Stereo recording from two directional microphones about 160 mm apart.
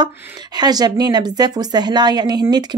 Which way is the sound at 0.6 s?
25° right (ahead or behind).